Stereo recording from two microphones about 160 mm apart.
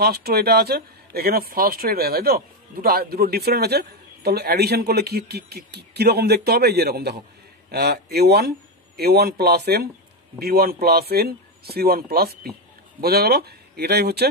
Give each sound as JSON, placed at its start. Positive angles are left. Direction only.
{"t": 0.0, "sound": "speech", "side_deg": -75}